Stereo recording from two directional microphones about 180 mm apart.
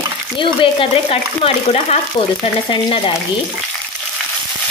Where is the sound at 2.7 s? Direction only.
25° left (ahead or behind).